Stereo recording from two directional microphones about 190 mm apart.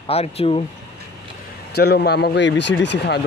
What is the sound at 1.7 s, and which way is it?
Speech, 55° left (ahead or behind).